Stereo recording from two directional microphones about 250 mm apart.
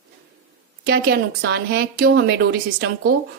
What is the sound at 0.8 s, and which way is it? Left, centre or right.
A woman's voice, right.